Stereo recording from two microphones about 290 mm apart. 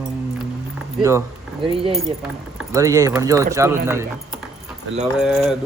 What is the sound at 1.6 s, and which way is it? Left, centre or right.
Speech, centre.